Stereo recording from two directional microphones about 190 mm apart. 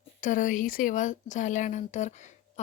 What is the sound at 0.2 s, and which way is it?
A woman's voice, 45° left (ahead or behind).